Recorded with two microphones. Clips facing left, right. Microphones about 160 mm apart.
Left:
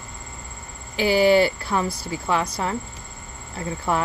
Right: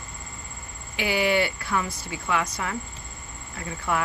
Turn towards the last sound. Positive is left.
turn(degrees=30)  # may be behind; listen again after turning